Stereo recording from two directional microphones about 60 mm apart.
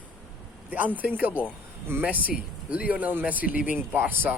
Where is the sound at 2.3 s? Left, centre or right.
Right.